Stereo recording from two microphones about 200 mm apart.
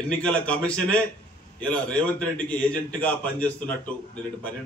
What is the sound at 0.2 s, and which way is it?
A man's voice, 5° left (ahead or behind).